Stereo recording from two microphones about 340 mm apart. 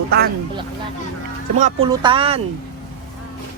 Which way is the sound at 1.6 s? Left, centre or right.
Centre.